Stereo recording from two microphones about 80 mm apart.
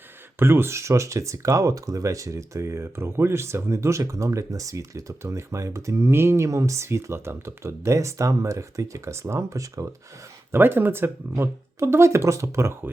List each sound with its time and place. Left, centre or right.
0.3 s speech: right
10.5 s speech: right